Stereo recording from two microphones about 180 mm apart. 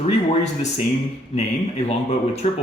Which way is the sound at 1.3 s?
35° left (ahead or behind).